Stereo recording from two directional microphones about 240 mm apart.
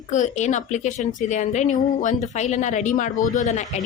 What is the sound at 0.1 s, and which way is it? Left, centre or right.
A woman's voice, left.